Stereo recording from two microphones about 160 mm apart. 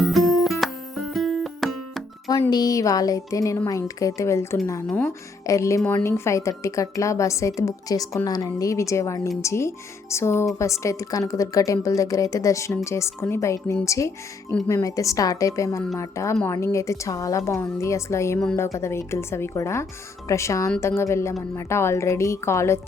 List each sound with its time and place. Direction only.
0.0 s music: centre (ahead or behind)
2.5 s speech: 25° left (ahead or behind)